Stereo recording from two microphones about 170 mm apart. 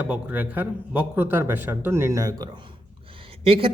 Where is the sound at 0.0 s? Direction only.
10° right (ahead or behind).